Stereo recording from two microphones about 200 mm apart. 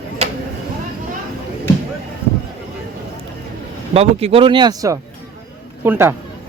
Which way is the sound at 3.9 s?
30° right (ahead or behind).